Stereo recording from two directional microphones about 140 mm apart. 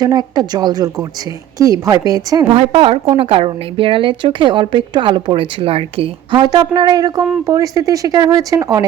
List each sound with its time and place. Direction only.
0.0 s speech: 30° right (ahead or behind)
2.5 s a woman's voice: 40° right (ahead or behind); by 8.8 s 25° right (ahead or behind)